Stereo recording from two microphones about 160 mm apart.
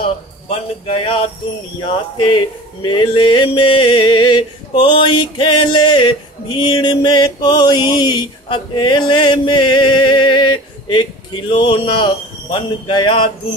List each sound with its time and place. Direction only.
0.8 s music: 35° left (ahead or behind)
1.8 s speech: 30° left (ahead or behind)